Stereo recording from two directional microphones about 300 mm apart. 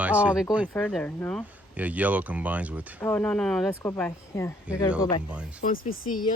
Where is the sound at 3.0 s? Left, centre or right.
Centre.